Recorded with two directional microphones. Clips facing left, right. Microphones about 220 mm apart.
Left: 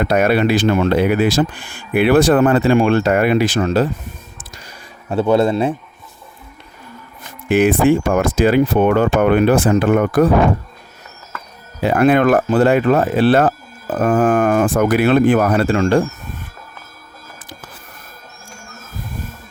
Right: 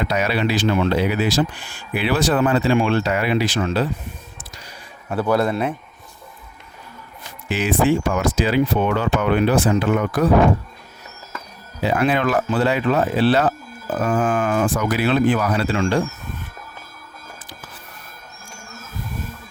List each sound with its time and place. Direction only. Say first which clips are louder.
0.0 s speech: left 6 dB; 50° left (ahead or behind)
4.4 s a sound: left 2 dB; 50° left (ahead or behind)
5.0 s speech: left 5 dB; 25° left (ahead or behind)
7.4 s speech: left 6 dB; 55° left (ahead or behind)
11.8 s speech: left 6 dB; 55° left (ahead or behind)